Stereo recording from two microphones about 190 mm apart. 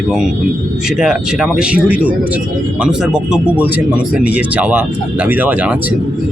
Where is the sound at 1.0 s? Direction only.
5° right (ahead or behind).